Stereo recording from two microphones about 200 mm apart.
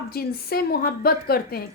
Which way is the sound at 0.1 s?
50° left (ahead or behind).